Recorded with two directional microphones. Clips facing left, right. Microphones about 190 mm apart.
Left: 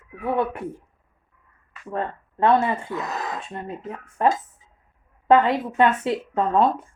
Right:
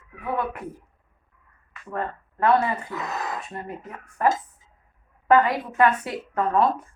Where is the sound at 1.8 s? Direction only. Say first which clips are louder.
Left 2 dB; 20° left (ahead or behind).